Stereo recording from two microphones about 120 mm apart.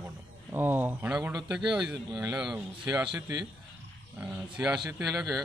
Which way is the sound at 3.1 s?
30° right (ahead or behind).